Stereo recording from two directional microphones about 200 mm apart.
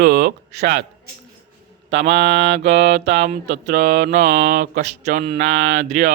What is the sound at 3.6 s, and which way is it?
Speech, 50° right (ahead or behind).